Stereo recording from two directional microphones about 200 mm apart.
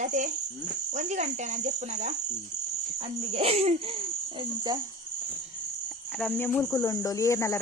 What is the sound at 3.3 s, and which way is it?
Speech, 30° right (ahead or behind).